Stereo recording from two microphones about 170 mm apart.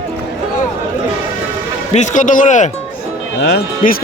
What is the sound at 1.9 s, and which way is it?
Speech, 45° left (ahead or behind).